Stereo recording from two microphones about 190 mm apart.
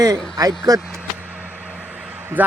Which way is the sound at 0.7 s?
Centre (ahead or behind).